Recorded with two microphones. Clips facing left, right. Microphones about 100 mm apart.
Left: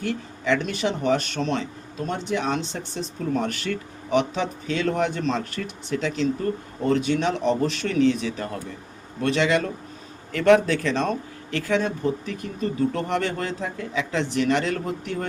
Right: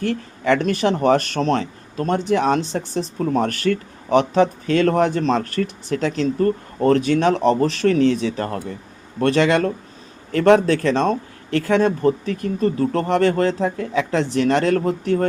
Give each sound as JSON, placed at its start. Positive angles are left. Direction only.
{"t": 0.0, "sound": "speech", "side_deg": -50}
{"t": 6.8, "sound": "speech", "side_deg": -55}